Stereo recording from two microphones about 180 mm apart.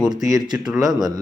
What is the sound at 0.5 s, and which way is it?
Speech, 5° right (ahead or behind).